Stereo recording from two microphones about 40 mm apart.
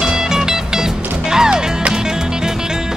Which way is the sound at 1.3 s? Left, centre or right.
Centre.